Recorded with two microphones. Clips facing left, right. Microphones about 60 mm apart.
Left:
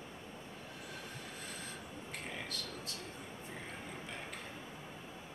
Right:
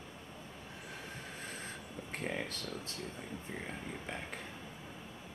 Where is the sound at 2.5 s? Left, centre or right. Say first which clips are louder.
Right 1 dB; right.